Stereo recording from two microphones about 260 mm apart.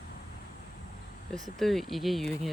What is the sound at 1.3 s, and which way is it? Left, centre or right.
Speech, right.